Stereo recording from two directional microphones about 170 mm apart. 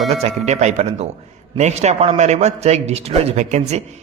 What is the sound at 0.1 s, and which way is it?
A man's voice, 40° right (ahead or behind).